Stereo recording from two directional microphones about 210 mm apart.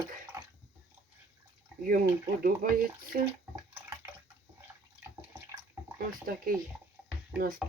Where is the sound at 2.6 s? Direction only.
40° right (ahead or behind).